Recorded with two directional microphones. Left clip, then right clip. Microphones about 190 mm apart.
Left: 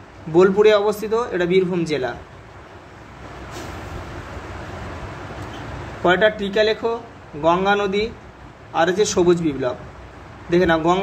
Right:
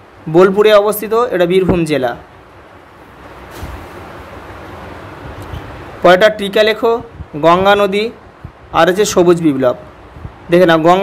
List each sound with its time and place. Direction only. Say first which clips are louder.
0.3 s a man's voice: right 6 dB; 40° right (ahead or behind)
6.0 s a man's voice: right 8 dB; 45° right (ahead or behind)